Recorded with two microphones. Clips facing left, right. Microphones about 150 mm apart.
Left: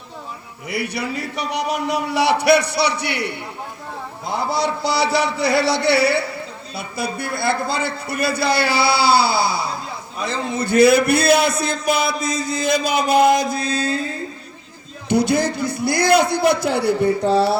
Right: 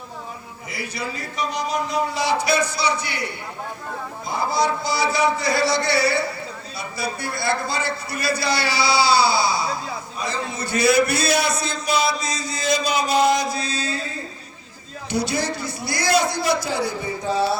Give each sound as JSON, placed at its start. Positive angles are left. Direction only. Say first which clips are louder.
{"t": 0.7, "sound": "a man's voice", "louder": "left 6 dB", "side_deg": 65}
{"t": 15.1, "sound": "a man's voice", "louder": "left 6 dB", "side_deg": 55}